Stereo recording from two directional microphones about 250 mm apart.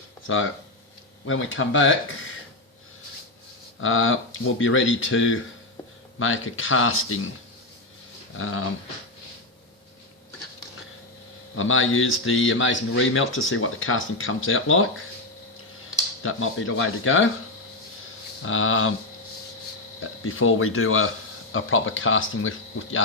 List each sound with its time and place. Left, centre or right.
1.3 s speech: left
3.8 s speech: left
8.4 s speech: left
11.5 s speech: left
16.2 s speech: left
18.4 s speech: left
20.2 s speech: left